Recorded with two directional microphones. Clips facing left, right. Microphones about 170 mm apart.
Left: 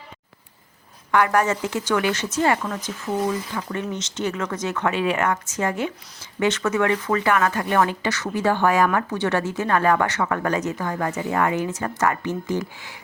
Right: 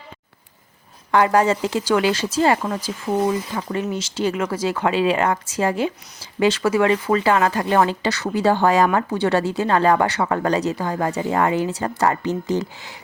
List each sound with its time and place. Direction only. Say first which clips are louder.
1.2 s a woman's voice: right 4 dB; 30° right (ahead or behind)
1.7 s speech: right 3 dB; 15° right (ahead or behind)
2.6 s a woman's voice: right 3 dB; 30° right (ahead or behind)
3.9 s speech: right 4 dB; 10° right (ahead or behind)
4.4 s a woman's voice: right 4 dB; 30° right (ahead or behind)
4.9 s speech: right 4 dB; 15° right (ahead or behind)
5.1 s a woman's voice: right 3 dB; 30° right (ahead or behind)
8.0 s a woman's voice: right 3 dB; 35° right (ahead or behind)
12.2 s speech: right 3 dB; 15° right (ahead or behind)